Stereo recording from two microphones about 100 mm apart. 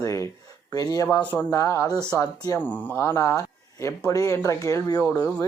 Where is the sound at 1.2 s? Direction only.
15° left (ahead or behind).